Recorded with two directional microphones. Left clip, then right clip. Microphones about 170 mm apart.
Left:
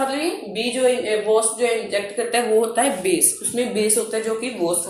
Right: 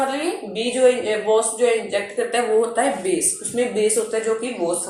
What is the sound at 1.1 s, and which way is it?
Speech, 35° left (ahead or behind).